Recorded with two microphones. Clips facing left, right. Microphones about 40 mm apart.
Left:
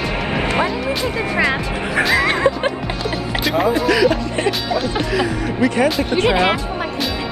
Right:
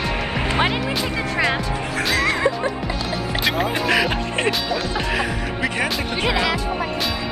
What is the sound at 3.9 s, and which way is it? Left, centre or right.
Speech, right.